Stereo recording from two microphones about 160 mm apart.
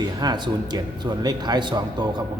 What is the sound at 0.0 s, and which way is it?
A man's voice, 25° right (ahead or behind).